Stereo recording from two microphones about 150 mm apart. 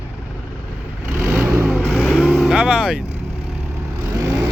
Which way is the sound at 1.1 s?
15° right (ahead or behind).